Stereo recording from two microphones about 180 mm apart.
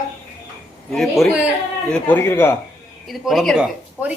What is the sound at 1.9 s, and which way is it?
Speech, 5° left (ahead or behind).